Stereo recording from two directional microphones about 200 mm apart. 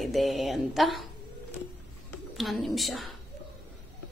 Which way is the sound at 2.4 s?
Centre (ahead or behind).